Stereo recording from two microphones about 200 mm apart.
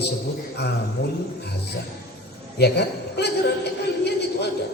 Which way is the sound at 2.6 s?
55° left (ahead or behind).